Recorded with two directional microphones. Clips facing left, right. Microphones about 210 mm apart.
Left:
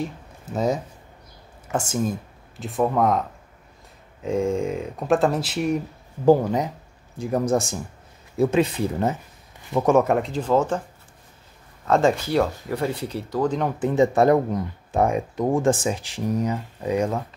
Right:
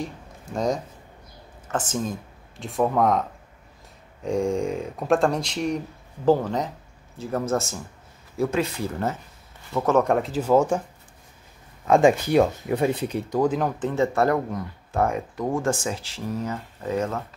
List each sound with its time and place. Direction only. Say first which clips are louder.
0.5 s speech: left 2 dB; 5° left (ahead or behind)
10.0 s speech: even; centre (ahead or behind)
11.9 s speech: right 2 dB; 15° right (ahead or behind)
13.5 s speech: even; centre (ahead or behind)
13.7 s speech: left 4 dB; 15° left (ahead or behind)